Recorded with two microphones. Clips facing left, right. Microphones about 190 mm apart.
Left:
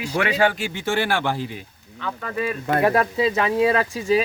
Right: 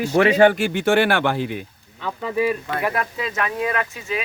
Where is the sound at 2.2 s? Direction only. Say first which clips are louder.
Right 6 dB; 10° right (ahead or behind).